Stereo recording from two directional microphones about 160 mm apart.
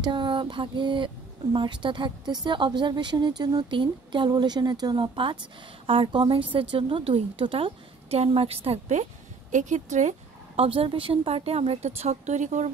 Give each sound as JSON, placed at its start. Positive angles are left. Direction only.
{"t": 0.0, "sound": "speech", "side_deg": -30}